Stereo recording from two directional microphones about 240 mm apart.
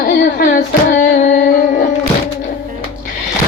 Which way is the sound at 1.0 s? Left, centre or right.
Left.